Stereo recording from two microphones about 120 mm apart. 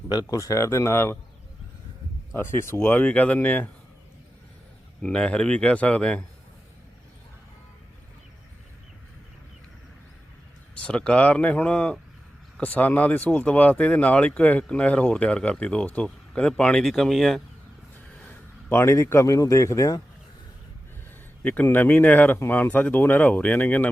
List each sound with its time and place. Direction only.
0.1 s speech: 30° left (ahead or behind)
2.3 s speech: 20° left (ahead or behind)
5.0 s speech: 10° left (ahead or behind)
10.8 s speech: 10° left (ahead or behind)
18.3 s a man's voice: 20° left (ahead or behind)
21.4 s speech: 15° left (ahead or behind)